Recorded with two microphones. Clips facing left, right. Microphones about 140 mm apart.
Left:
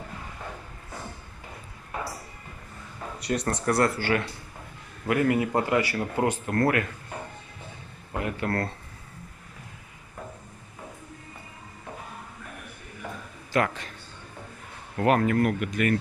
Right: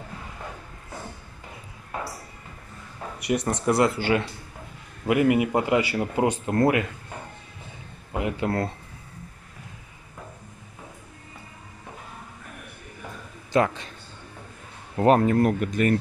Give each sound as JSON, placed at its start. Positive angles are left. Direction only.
{"t": 3.3, "sound": "speech", "side_deg": -15}
{"t": 8.1, "sound": "speech", "side_deg": -20}
{"t": 13.5, "sound": "a man's voice", "side_deg": -20}
{"t": 15.0, "sound": "speech", "side_deg": -25}